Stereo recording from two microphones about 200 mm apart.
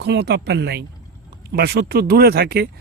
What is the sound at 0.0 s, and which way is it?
Speech, 55° right (ahead or behind).